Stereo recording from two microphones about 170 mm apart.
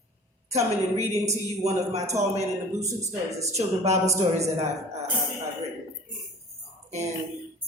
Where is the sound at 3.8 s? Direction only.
40° right (ahead or behind).